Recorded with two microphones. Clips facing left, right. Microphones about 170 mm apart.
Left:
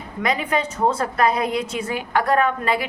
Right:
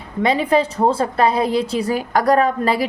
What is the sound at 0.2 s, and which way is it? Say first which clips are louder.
A woman's voice: right 6 dB; 30° right (ahead or behind).